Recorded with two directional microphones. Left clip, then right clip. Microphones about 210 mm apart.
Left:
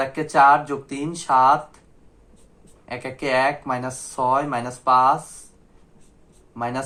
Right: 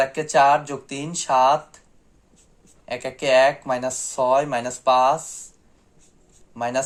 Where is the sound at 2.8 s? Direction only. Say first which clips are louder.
Right 3 dB; 50° right (ahead or behind).